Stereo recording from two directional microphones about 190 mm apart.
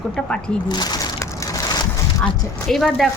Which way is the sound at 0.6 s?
20° left (ahead or behind).